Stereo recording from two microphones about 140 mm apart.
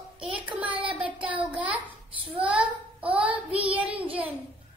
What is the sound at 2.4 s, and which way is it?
Child singing, 10° right (ahead or behind).